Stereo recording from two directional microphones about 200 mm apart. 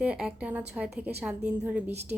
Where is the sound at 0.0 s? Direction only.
5° right (ahead or behind).